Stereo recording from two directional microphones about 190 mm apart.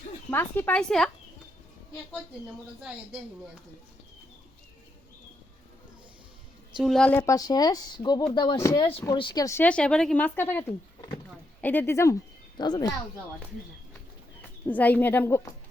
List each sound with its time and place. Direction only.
0.3 s speech: 10° left (ahead or behind)
6.8 s speech: 5° left (ahead or behind); by 12.9 s 20° left (ahead or behind)
14.6 s speech: 10° left (ahead or behind)